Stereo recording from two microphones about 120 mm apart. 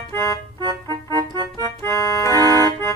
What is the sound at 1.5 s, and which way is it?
Organ, 25° left (ahead or behind).